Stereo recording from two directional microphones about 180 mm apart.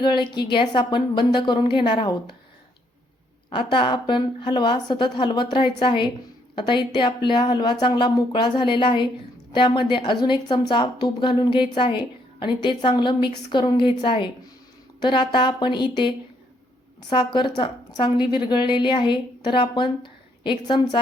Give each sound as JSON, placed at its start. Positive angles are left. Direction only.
{"t": 0.0, "sound": "a woman's voice", "side_deg": 25}
{"t": 3.5, "sound": "a woman's voice", "side_deg": 25}